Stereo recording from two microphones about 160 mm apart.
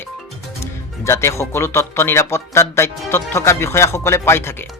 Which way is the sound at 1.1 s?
15° left (ahead or behind).